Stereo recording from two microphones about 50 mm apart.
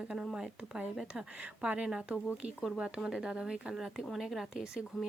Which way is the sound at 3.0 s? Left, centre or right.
Centre.